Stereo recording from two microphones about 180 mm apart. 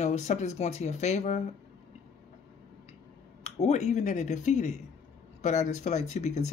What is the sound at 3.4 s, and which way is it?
Speech, 35° left (ahead or behind).